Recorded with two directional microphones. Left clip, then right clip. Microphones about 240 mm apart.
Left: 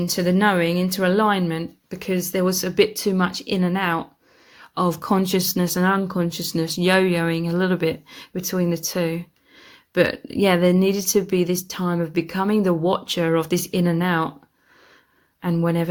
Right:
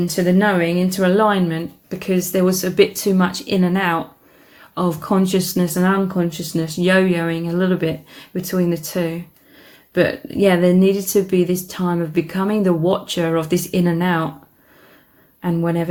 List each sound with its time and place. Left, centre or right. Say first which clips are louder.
0.0 s speech: right 2 dB; left
15.4 s speech: right 2 dB; left